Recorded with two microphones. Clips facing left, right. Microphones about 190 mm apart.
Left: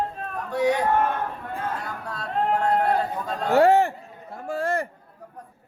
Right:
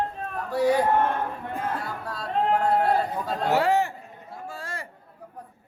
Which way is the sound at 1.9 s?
Centre (ahead or behind).